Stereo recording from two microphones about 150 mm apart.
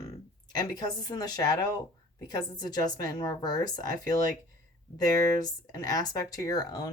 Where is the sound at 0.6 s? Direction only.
25° left (ahead or behind).